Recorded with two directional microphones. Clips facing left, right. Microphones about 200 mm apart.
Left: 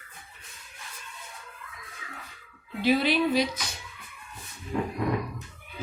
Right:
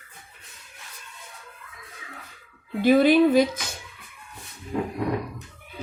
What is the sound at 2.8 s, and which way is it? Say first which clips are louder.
Speech: right 7 dB; 50° right (ahead or behind).